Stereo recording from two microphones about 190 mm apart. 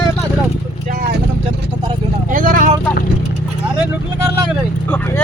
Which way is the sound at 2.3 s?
45° right (ahead or behind).